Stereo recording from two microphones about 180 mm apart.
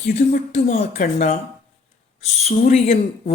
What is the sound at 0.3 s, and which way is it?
Speech, 45° left (ahead or behind).